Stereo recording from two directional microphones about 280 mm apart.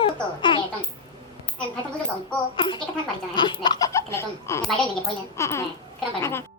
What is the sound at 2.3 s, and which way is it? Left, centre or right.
Speech, centre.